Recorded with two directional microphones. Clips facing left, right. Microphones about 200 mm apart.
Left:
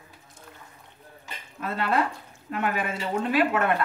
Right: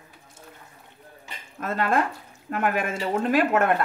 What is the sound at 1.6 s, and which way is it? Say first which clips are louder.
Speech: right 2 dB; 45° right (ahead or behind).